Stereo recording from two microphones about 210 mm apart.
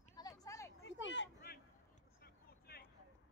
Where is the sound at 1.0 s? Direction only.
60° left (ahead or behind).